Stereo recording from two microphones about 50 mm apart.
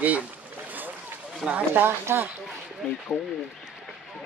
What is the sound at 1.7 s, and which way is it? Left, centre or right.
Speech, right.